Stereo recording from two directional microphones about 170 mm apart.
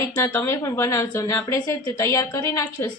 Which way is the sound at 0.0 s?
15° left (ahead or behind).